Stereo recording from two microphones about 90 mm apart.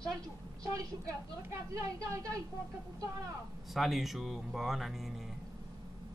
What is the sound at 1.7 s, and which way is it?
Speech, 35° right (ahead or behind).